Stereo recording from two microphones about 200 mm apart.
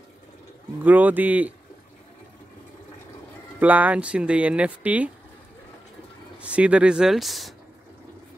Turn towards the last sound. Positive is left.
turn(degrees=0)  # may be behind; listen again after turning